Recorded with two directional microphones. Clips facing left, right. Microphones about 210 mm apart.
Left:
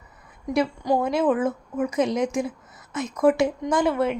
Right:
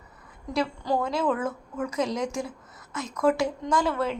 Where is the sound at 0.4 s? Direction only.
20° left (ahead or behind).